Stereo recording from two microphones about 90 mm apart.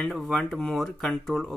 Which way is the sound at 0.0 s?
5° left (ahead or behind).